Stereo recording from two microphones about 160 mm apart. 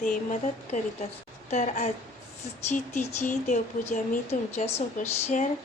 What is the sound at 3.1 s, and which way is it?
Speech, 50° left (ahead or behind).